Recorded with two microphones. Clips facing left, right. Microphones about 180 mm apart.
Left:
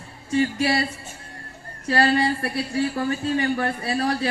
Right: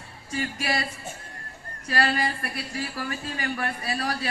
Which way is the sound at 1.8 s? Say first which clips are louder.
Left 6 dB; 30° left (ahead or behind).